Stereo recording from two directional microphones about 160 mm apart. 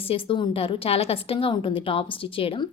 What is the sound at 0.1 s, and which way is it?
A woman's voice, 30° left (ahead or behind).